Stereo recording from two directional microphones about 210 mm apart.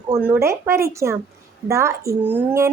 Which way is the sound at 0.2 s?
10° right (ahead or behind).